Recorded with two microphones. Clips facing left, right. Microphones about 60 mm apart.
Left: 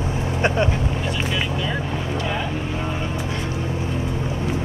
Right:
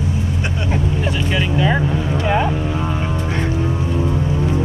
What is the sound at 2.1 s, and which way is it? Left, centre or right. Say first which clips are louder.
Vehicle: right 8 dB; right.